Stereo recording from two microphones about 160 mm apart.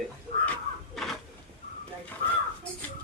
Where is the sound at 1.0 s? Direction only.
Centre (ahead or behind).